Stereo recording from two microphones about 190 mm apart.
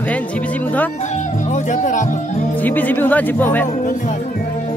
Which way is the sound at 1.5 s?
40° left (ahead or behind).